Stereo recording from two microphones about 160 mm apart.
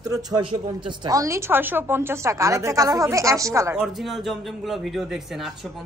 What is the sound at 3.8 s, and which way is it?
A man's voice, centre (ahead or behind).